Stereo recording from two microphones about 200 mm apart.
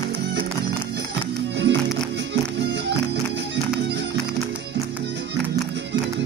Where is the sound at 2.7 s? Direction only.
60° right (ahead or behind).